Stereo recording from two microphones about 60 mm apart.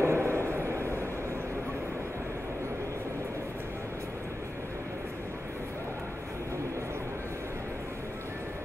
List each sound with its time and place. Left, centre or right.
0.0 s vehicle: right